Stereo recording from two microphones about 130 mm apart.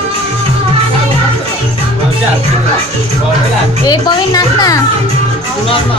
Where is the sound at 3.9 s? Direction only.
30° left (ahead or behind).